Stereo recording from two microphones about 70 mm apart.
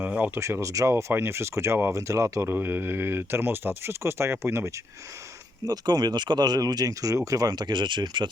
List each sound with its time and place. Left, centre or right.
0.2 s speech: right
2.5 s speech: right
5.6 s speech: right